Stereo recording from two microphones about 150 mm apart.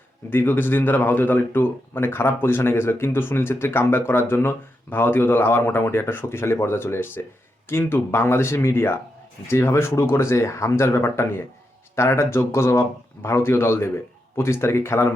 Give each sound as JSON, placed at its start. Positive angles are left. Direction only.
{"t": 0.3, "sound": "speech", "side_deg": 15}